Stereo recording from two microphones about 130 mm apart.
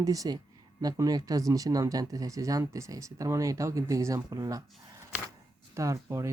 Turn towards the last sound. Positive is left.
turn(degrees=-20)  # may be behind; listen again after turning